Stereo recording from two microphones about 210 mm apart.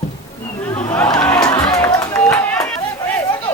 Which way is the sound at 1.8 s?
15° left (ahead or behind).